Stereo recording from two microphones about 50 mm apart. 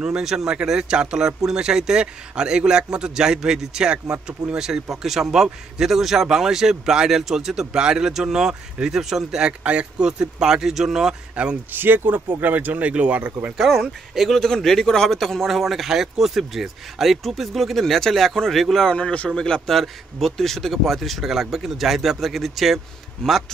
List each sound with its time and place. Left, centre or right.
0.0 s speech: centre
9.5 s speech: right
11.7 s speech: right
13.7 s speech: centre
18.9 s speech: left
19.7 s speech: centre
23.2 s speech: centre